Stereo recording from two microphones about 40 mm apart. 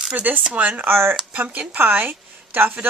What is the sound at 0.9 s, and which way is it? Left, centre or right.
Speech, right.